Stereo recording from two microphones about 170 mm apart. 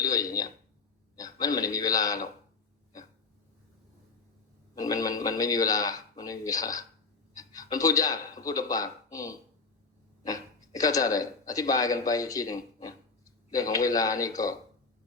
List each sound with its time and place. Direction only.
0.0 s a sound: 20° left (ahead or behind)
1.1 s a man's voice: 20° left (ahead or behind)
4.7 s a man's voice: 20° left (ahead or behind)
10.8 s a man's voice: 20° left (ahead or behind)